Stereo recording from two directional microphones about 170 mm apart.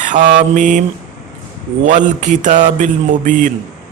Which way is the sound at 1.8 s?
45° right (ahead or behind).